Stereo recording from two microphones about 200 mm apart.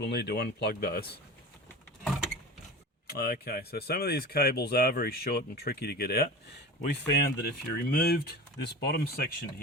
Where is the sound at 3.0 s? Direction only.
50° left (ahead or behind).